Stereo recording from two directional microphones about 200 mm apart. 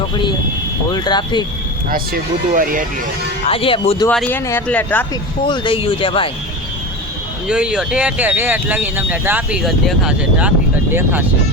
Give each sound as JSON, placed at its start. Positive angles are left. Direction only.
{"t": 0.9, "sound": "speech", "side_deg": 20}
{"t": 1.9, "sound": "speech", "side_deg": -45}
{"t": 3.4, "sound": "speech", "side_deg": 30}
{"t": 4.1, "sound": "speech", "side_deg": 5}
{"t": 5.5, "sound": "speech", "side_deg": 25}
{"t": 7.4, "sound": "speech", "side_deg": -5}